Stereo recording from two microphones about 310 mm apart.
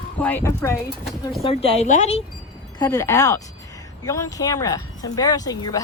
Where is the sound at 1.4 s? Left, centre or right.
Centre.